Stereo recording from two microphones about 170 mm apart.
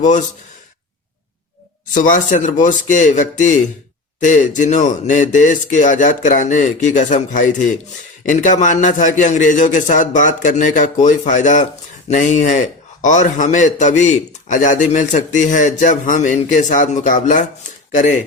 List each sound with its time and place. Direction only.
1.9 s a man's voice: 50° left (ahead or behind)